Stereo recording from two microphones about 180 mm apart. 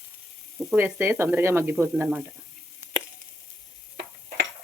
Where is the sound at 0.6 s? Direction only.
10° right (ahead or behind).